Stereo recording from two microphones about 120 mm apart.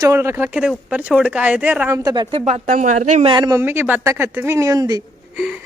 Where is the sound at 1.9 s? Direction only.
35° right (ahead or behind).